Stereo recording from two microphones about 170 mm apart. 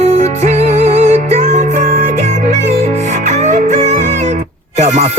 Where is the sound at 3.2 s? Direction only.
45° right (ahead or behind).